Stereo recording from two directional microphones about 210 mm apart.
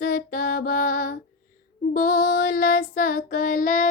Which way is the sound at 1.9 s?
40° left (ahead or behind).